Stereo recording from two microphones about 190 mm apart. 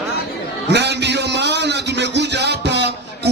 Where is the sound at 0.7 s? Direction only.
65° right (ahead or behind).